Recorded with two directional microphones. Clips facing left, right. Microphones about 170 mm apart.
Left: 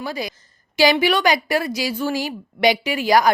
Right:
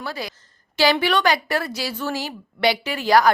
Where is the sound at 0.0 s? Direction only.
15° left (ahead or behind).